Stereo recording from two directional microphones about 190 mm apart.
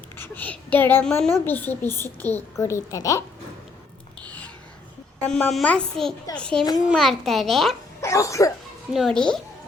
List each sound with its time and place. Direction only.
0.2 s a woman's voice: 10° left (ahead or behind)
4.2 s a sound: 10° left (ahead or behind)
5.2 s a child's voice: 5° left (ahead or behind)
8.0 s a woman's voice: 15° left (ahead or behind)
8.9 s a child's voice: centre (ahead or behind)